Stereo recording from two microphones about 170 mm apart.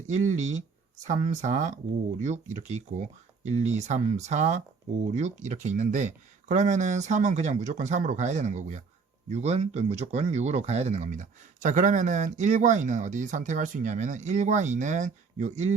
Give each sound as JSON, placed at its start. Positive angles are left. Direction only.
{"t": 0.1, "sound": "speech", "side_deg": -45}